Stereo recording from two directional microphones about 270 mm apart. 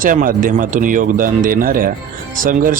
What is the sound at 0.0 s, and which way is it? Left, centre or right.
Speech, right.